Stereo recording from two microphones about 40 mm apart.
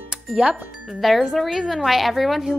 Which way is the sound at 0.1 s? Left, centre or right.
Right.